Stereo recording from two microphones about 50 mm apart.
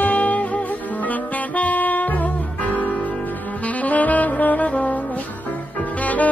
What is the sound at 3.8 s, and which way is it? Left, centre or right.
Saxophone, left.